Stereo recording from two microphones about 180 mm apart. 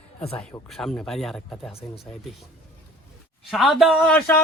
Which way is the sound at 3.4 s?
Centre (ahead or behind).